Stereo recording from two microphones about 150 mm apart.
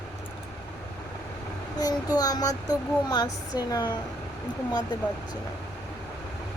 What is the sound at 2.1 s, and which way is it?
Speech, 25° left (ahead or behind).